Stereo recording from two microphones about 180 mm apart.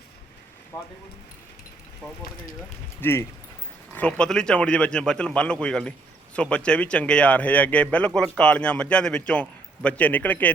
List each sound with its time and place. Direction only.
0.7 s speech: 15° left (ahead or behind)
3.0 s a man's voice: 15° left (ahead or behind)